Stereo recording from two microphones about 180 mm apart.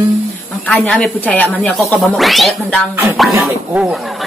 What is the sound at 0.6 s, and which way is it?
Speech, 5° left (ahead or behind).